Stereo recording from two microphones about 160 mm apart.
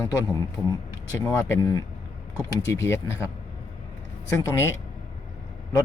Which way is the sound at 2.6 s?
15° left (ahead or behind).